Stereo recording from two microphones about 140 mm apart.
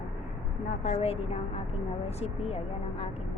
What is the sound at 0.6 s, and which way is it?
Speech, 65° left (ahead or behind).